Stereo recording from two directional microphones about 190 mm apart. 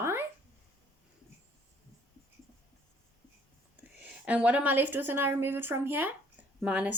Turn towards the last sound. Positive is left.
turn(degrees=-5)  # may be behind; listen again after turning